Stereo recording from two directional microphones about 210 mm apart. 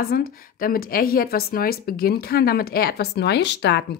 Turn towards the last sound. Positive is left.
turn(degrees=55)  # may be behind; listen again after turning